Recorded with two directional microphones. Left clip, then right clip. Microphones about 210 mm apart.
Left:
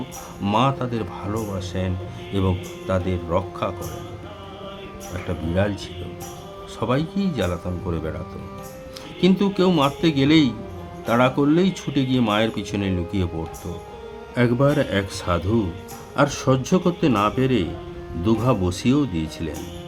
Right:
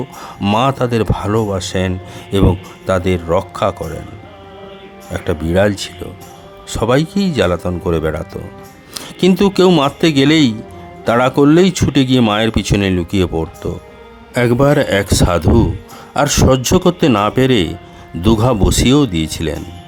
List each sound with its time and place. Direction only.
0.4 s speech: 45° right (ahead or behind)
5.3 s speech: 50° right (ahead or behind)